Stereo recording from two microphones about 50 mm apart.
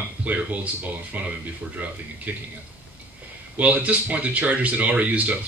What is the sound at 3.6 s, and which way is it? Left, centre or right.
Speech, right.